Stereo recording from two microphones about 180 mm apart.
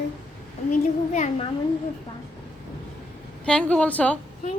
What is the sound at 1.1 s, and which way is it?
Speech, 40° left (ahead or behind).